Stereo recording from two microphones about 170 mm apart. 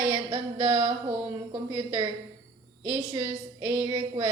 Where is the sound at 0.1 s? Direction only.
30° right (ahead or behind).